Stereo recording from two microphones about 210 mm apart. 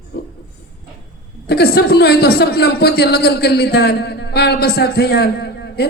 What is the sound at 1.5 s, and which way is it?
A man's voice, 50° left (ahead or behind).